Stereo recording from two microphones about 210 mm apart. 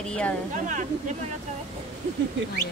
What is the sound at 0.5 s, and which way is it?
Speech, 35° right (ahead or behind).